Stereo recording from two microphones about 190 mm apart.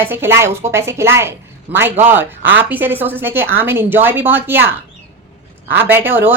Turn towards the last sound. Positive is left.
turn(degrees=-10)  # may be behind; listen again after turning